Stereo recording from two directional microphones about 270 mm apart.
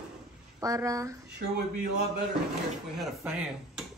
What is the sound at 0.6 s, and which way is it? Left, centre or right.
Speech, centre.